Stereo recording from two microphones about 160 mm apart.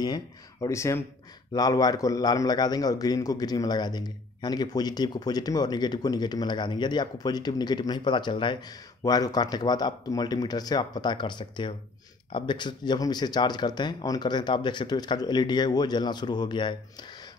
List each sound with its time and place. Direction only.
0.0 s a man's voice: 25° left (ahead or behind)